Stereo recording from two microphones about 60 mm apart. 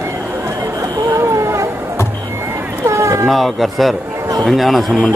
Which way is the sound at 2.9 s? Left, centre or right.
Right.